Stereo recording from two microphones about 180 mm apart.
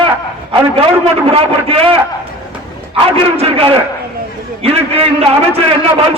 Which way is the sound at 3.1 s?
35° right (ahead or behind).